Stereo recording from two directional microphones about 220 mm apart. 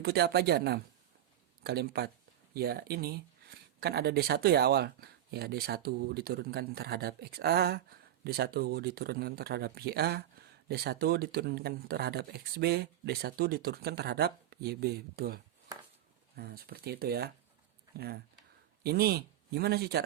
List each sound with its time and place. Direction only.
0.0 s speech: 45° right (ahead or behind)